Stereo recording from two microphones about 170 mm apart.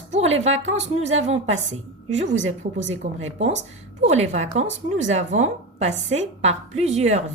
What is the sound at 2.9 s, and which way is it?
A woman's voice, 45° right (ahead or behind).